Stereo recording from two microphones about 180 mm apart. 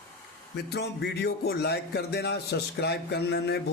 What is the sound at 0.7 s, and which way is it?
Music, 65° left (ahead or behind).